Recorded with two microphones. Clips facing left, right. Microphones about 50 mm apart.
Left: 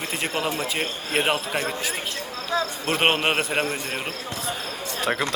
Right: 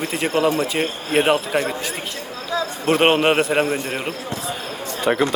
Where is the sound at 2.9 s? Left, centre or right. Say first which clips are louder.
Right 7 dB; centre.